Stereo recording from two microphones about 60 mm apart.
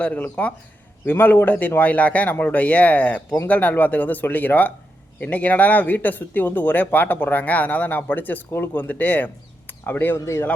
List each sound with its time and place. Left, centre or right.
0.0 s speech: left